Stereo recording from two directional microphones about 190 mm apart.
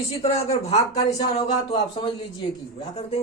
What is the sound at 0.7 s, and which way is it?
Speech, 35° left (ahead or behind).